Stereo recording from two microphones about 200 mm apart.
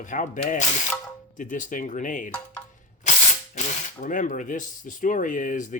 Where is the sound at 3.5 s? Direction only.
40° left (ahead or behind).